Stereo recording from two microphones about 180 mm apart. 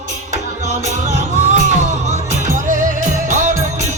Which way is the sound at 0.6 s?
40° right (ahead or behind).